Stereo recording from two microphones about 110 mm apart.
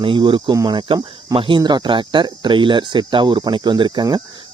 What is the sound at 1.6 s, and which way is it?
Speech, 40° right (ahead or behind).